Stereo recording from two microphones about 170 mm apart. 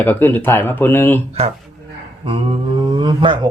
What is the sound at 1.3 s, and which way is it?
Speech, 35° right (ahead or behind).